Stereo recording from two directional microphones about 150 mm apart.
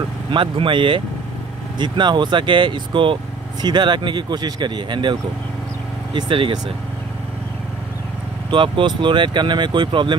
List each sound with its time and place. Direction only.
0.3 s speech: 35° right (ahead or behind)
6.1 s speech: 35° right (ahead or behind)
8.5 s speech: 35° right (ahead or behind)